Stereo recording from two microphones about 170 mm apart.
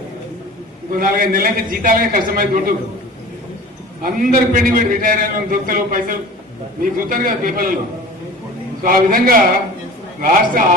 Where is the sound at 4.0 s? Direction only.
55° right (ahead or behind).